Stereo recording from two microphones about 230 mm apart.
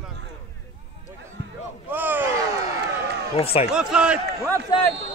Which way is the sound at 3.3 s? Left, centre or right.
Left.